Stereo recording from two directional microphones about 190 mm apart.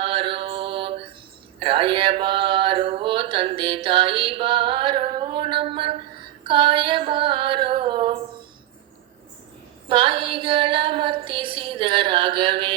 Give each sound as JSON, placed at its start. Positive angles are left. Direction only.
{"t": 0.0, "sound": "mantra", "side_deg": -30}
{"t": 1.6, "sound": "a sound", "side_deg": -30}
{"t": 9.9, "sound": "female singing", "side_deg": -25}